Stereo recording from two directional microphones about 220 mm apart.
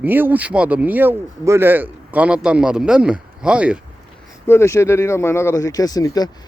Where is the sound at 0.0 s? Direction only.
10° right (ahead or behind).